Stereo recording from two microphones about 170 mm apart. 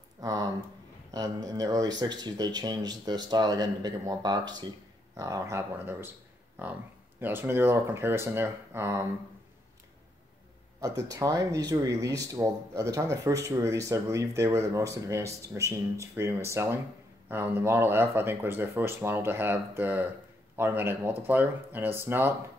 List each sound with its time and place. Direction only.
0.2 s speech: 20° right (ahead or behind)
10.8 s speech: 20° right (ahead or behind)